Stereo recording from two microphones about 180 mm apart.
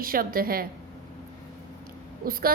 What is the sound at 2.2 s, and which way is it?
Speech, 55° right (ahead or behind).